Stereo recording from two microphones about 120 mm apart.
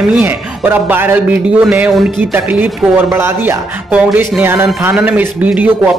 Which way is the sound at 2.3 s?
15° right (ahead or behind).